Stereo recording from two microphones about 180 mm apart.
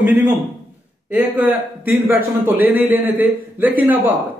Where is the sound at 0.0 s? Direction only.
10° right (ahead or behind).